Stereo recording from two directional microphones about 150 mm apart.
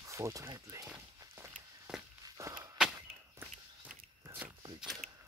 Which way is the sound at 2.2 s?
25° right (ahead or behind).